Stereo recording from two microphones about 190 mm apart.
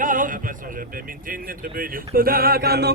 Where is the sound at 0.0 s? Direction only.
45° right (ahead or behind).